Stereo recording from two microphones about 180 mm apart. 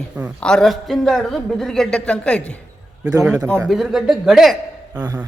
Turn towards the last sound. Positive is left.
turn(degrees=0)  # may be behind; listen again after turning